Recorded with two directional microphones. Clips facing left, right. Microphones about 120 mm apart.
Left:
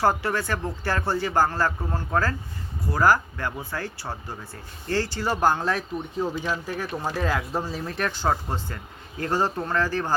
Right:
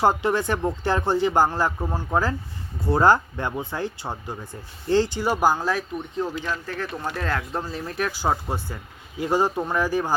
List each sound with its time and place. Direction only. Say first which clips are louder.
0.0 s speech: right 3 dB; 20° right (ahead or behind)
2.8 s speech: right 3 dB; 25° right (ahead or behind)